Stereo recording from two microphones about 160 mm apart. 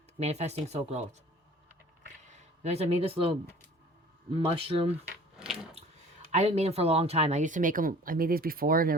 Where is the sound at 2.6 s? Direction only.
40° right (ahead or behind).